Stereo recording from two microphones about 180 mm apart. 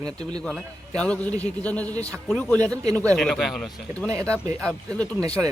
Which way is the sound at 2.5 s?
20° right (ahead or behind).